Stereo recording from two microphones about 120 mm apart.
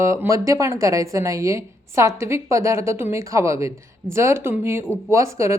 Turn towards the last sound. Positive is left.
turn(degrees=-25)  # may be behind; listen again after turning